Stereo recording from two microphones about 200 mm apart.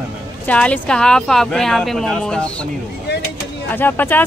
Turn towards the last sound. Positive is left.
turn(degrees=10)  # may be behind; listen again after turning